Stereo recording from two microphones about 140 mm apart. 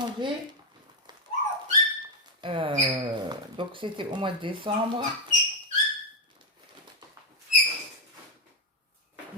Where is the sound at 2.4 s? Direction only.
35° right (ahead or behind).